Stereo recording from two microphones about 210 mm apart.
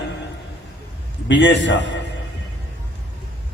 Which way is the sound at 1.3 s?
60° left (ahead or behind).